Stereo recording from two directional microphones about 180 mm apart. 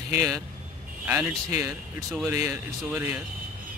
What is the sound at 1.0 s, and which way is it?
Speech, 15° right (ahead or behind).